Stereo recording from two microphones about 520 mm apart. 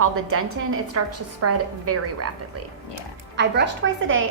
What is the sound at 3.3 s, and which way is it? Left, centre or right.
Speech, centre.